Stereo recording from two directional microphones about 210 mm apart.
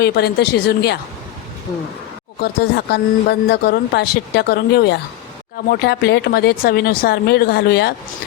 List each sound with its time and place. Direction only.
0.0 s speech: 50° left (ahead or behind)
2.4 s speech: 50° left (ahead or behind)